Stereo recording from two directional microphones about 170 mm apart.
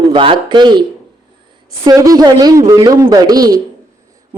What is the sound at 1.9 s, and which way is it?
A man's voice, 20° right (ahead or behind).